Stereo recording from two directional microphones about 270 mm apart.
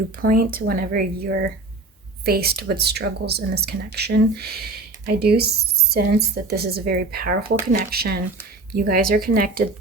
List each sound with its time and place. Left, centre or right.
0.2 s speech: right